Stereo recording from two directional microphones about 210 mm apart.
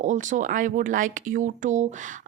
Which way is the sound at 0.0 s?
35° right (ahead or behind).